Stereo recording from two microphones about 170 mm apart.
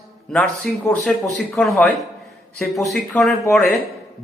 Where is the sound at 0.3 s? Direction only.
5° left (ahead or behind).